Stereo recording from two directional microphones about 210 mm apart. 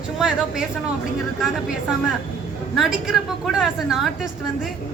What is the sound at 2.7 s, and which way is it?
A woman's voice, centre (ahead or behind).